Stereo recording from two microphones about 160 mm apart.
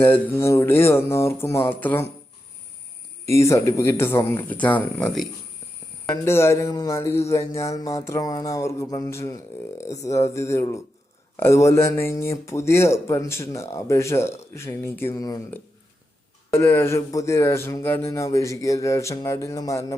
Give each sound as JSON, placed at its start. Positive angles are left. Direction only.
{"t": 0.0, "sound": "speech", "side_deg": 15}
{"t": 3.2, "sound": "speech", "side_deg": 20}
{"t": 6.2, "sound": "speech", "side_deg": 15}
{"t": 15.1, "sound": "speech", "side_deg": 25}